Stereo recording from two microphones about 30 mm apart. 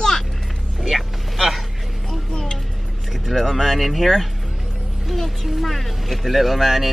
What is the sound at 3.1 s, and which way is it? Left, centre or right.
Speech, centre.